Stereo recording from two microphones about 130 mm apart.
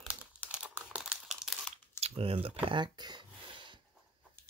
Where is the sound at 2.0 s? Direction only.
45° right (ahead or behind).